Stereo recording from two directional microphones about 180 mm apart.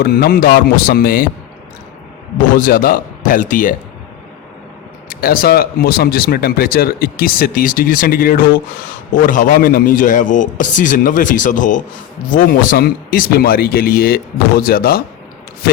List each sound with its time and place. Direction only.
0.0 s speech: 60° left (ahead or behind)
2.6 s a man's voice: 50° left (ahead or behind)
5.0 s a man's voice: 55° left (ahead or behind)